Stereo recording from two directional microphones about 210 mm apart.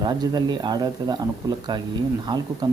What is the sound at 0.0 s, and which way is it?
Speech, 20° right (ahead or behind).